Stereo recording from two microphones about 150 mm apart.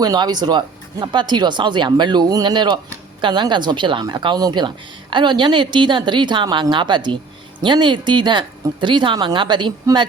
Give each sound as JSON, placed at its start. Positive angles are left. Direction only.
{"t": 0.0, "sound": "speech", "side_deg": -25}